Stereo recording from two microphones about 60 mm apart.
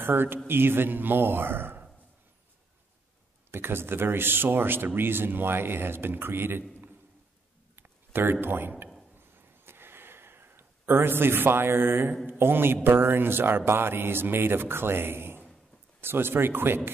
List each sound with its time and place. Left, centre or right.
0.0 s a man's voice: right
3.5 s a man's voice: right
7.7 s a sound: right
12.3 s a man's voice: right